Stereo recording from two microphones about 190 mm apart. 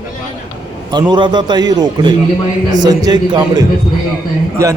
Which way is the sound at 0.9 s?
25° right (ahead or behind).